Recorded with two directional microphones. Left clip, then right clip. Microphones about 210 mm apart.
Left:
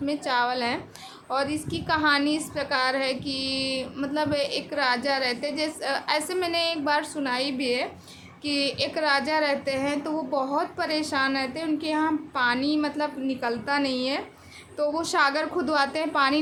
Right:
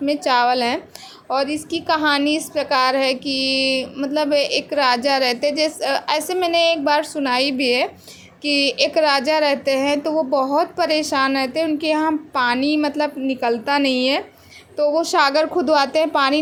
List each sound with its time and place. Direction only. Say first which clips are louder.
0.0 s a woman's voice: right 8 dB; 25° right (ahead or behind)
14.8 s a woman's voice: right 7 dB; 20° right (ahead or behind)